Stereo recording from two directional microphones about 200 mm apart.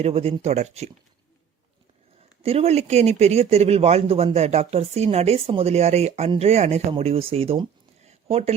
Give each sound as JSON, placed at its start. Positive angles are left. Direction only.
{"t": 0.0, "sound": "speech", "side_deg": -30}
{"t": 2.4, "sound": "speech", "side_deg": -30}